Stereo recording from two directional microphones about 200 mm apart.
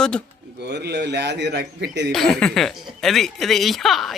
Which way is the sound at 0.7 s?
60° right (ahead or behind).